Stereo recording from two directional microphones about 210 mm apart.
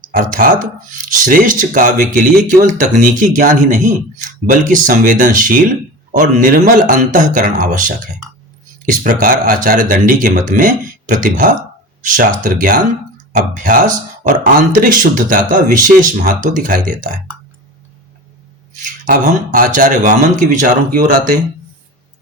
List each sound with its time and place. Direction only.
0.0 s speech: 40° right (ahead or behind)
18.8 s speech: 40° right (ahead or behind)